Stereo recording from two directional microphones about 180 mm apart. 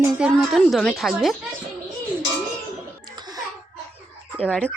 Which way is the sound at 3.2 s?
20° right (ahead or behind).